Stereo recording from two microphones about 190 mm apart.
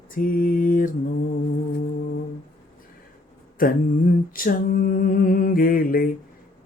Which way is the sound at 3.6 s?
50° left (ahead or behind).